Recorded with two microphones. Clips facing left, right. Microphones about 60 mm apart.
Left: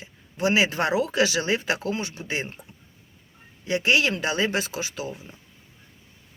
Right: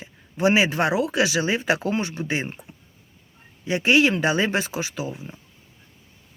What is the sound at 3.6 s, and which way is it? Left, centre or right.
Speech, right.